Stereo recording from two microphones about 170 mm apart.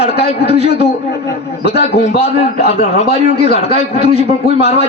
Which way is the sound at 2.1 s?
75° left (ahead or behind).